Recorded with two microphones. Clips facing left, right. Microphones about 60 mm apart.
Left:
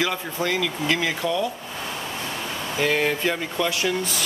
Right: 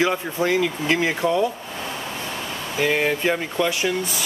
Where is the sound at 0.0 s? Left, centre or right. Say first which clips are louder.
Right 4 dB; right.